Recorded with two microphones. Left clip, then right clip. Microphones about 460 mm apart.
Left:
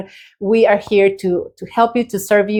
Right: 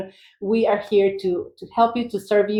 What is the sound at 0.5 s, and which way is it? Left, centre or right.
A woman's voice, left.